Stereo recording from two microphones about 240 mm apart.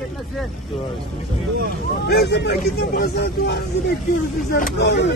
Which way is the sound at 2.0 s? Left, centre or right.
Left.